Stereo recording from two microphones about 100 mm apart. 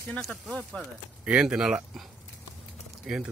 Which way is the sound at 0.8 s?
5° right (ahead or behind).